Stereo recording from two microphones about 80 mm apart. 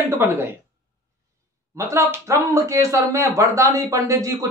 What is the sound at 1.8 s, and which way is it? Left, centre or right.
A man's voice, right.